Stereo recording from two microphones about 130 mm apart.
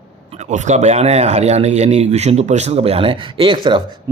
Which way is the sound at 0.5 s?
65° right (ahead or behind).